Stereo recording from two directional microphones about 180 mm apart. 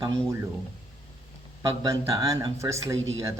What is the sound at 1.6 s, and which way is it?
Speech, 15° right (ahead or behind).